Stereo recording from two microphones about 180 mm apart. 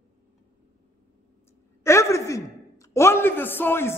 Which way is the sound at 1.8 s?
15° left (ahead or behind).